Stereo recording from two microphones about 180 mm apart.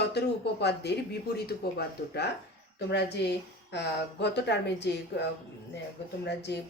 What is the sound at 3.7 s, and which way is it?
Speech, 70° left (ahead or behind).